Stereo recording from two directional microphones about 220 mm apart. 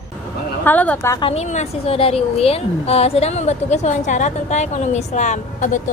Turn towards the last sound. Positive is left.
turn(degrees=35)  # may be behind; listen again after turning